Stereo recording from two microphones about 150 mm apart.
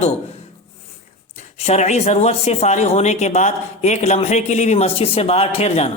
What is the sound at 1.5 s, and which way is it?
Speech, 45° left (ahead or behind).